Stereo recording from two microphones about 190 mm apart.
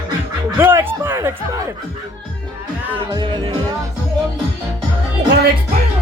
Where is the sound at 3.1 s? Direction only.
25° right (ahead or behind).